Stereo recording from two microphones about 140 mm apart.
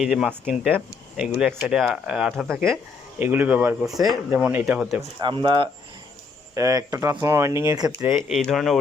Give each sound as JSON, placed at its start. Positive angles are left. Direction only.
{"t": 0.0, "sound": "speech", "side_deg": -5}
{"t": 3.2, "sound": "speech", "side_deg": -15}
{"t": 5.2, "sound": "speech", "side_deg": -35}
{"t": 8.3, "sound": "speech", "side_deg": 0}